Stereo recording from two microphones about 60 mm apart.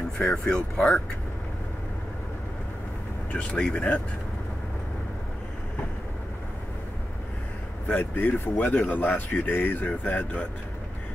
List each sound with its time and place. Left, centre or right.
0.2 s speech: centre
3.3 s speech: centre
7.9 s speech: left